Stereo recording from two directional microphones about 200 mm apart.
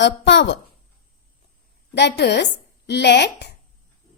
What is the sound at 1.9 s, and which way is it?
Speech, 60° left (ahead or behind).